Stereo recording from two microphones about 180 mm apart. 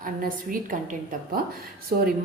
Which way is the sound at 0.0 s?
50° right (ahead or behind).